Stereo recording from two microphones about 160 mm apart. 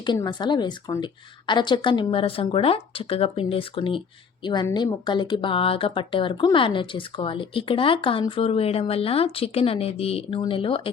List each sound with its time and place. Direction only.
0.3 s speech: 30° left (ahead or behind)